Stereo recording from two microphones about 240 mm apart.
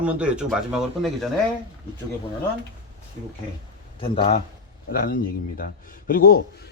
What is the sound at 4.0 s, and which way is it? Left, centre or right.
Speech, left.